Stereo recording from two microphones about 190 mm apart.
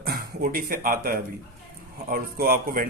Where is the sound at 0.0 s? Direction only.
50° right (ahead or behind).